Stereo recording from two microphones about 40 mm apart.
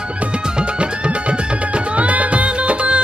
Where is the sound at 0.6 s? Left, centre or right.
Right.